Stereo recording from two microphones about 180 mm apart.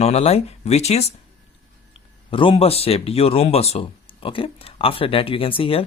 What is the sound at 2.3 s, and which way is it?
Speech, 30° left (ahead or behind).